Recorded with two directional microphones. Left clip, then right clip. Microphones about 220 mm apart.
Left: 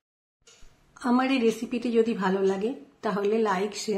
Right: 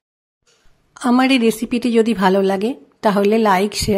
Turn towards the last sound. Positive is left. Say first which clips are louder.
# right 11 dB
turn(degrees=-40)  # may be behind; listen again after turning